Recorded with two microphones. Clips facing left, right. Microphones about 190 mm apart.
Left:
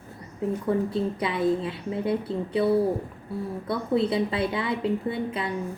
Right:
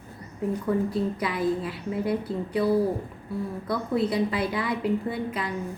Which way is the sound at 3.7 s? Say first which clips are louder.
Left 2 dB; 25° left (ahead or behind).